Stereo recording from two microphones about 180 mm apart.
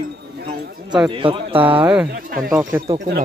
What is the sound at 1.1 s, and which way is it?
Speech, 30° right (ahead or behind).